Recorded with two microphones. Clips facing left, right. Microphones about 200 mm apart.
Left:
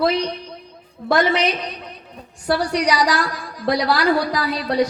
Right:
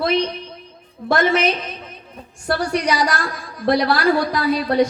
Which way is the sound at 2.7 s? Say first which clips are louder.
Even; 25° right (ahead or behind).